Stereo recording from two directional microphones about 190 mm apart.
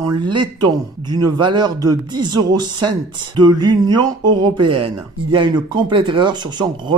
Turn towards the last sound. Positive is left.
turn(degrees=-25)  # may be behind; listen again after turning